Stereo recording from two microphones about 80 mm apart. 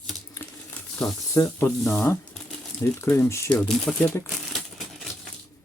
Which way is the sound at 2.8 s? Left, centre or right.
Left.